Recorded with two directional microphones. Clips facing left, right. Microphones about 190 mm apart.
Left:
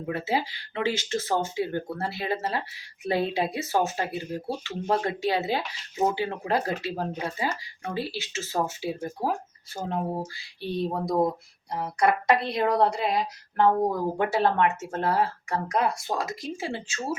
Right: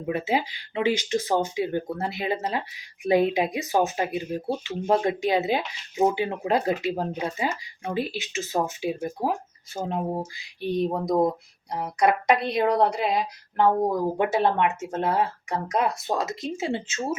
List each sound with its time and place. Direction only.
0.0 s speech: 20° right (ahead or behind)